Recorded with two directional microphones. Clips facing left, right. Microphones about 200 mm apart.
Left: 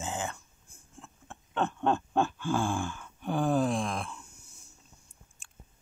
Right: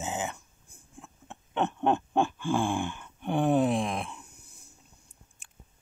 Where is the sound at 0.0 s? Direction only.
20° right (ahead or behind).